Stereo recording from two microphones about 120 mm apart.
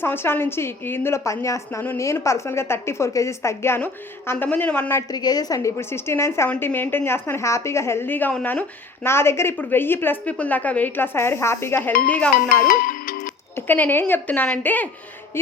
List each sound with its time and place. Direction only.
0.0 s a woman's voice: 20° left (ahead or behind)
5.1 s a woman's voice: 35° left (ahead or behind); by 8.6 s 10° left (ahead or behind)
9.0 s a woman's voice: 20° left (ahead or behind)
13.6 s a woman's voice: 15° left (ahead or behind)